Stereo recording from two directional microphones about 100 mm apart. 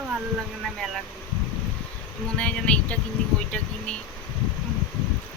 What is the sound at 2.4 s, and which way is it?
Speech, 10° left (ahead or behind).